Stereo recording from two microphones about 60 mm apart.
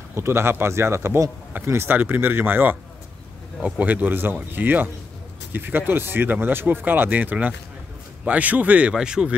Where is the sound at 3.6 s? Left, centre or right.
Right.